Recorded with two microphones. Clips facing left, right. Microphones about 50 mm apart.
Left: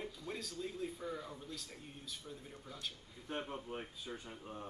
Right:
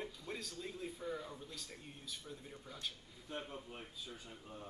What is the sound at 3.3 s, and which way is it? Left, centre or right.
A man's voice, left.